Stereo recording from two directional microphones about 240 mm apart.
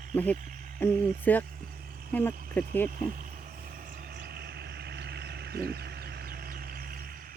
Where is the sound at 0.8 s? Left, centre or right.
Centre.